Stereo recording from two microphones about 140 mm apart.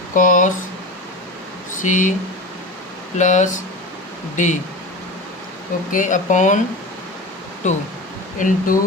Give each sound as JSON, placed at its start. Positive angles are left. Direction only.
{"t": 0.1, "sound": "speech", "side_deg": 70}
{"t": 1.8, "sound": "speech", "side_deg": 65}
{"t": 3.2, "sound": "speech", "side_deg": 60}
{"t": 5.9, "sound": "speech", "side_deg": 65}
{"t": 7.6, "sound": "speech", "side_deg": 60}